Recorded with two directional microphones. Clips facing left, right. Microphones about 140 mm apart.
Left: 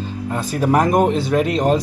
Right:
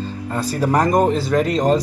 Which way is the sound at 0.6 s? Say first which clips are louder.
Left 1 dB; 5° left (ahead or behind).